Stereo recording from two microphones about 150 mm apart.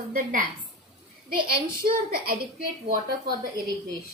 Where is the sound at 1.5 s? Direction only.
75° right (ahead or behind).